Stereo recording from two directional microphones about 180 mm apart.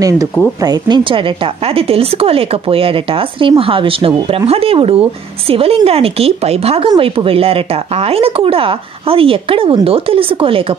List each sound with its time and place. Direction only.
0.6 s speech: 25° right (ahead or behind)